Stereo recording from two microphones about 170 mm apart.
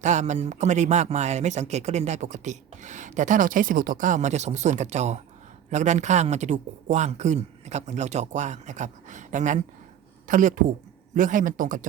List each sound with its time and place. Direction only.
0.0 s speech: 45° right (ahead or behind)